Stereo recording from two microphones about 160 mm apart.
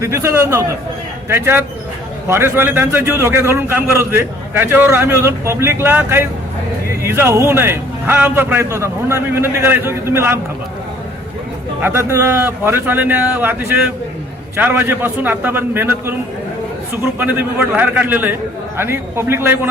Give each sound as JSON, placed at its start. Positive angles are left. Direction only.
{"t": 0.0, "sound": "a man's voice", "side_deg": -20}
{"t": 11.8, "sound": "a man's voice", "side_deg": -15}
{"t": 17.2, "sound": "a man's voice", "side_deg": -10}